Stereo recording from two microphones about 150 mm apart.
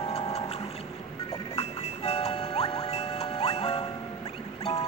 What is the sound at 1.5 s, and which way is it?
Music, 45° left (ahead or behind).